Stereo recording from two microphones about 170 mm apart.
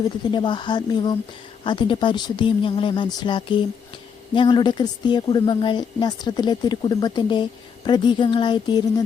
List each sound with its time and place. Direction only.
0.0 s a woman's voice: 25° left (ahead or behind)